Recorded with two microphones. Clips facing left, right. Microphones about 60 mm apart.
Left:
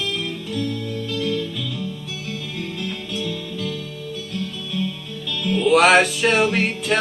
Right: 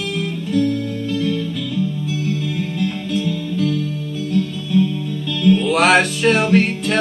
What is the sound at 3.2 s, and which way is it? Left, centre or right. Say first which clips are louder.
Music: right 7 dB; centre.